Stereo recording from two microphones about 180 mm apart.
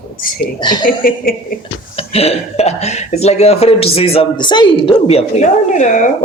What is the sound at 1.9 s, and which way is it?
Speech, 35° left (ahead or behind).